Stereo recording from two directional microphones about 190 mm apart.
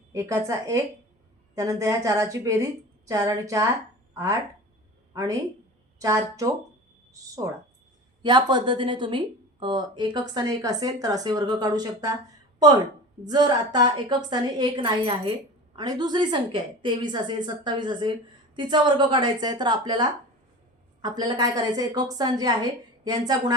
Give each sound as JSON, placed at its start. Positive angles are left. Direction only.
{"t": 0.1, "sound": "a woman's voice", "side_deg": -15}
{"t": 13.2, "sound": "speech", "side_deg": -20}